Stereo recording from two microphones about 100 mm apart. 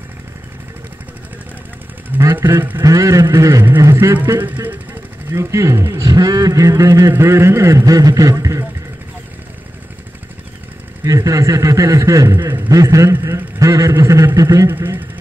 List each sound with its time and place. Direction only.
2.1 s vehicle: 20° right (ahead or behind)
2.8 s a man's voice: 35° right (ahead or behind)
5.3 s a man's voice: 30° right (ahead or behind)
11.1 s a man's voice: 35° right (ahead or behind)
14.7 s speech: 20° right (ahead or behind)